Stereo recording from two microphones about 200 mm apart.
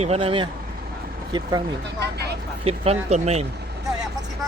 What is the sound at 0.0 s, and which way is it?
Speech, 30° right (ahead or behind).